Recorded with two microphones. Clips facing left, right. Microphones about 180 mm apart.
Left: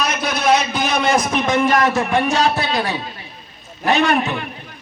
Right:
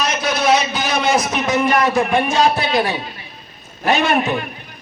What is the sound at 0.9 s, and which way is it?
A man's voice, 5° right (ahead or behind).